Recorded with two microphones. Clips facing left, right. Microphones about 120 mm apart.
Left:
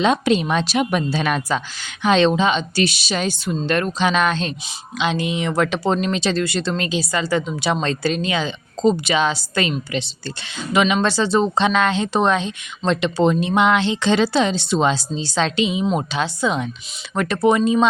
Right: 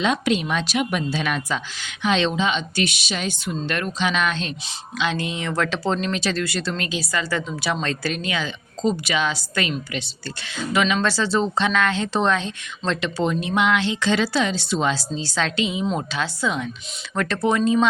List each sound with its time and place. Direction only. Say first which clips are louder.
0.0 s a woman's voice: left 4 dB; 35° left (ahead or behind)
4.9 s speech: left 4 dB; 20° left (ahead or behind)